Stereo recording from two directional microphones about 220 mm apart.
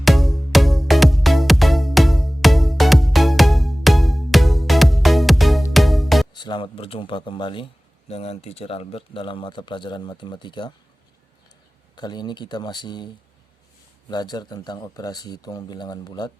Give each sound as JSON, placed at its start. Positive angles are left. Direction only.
{"t": 0.0, "sound": "music", "side_deg": 0}
{"t": 6.3, "sound": "speech", "side_deg": 20}
{"t": 11.9, "sound": "speech", "side_deg": 20}
{"t": 14.1, "sound": "speech", "side_deg": 20}